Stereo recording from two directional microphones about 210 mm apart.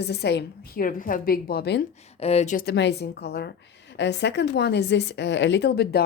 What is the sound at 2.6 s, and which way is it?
A woman's voice, 55° left (ahead or behind).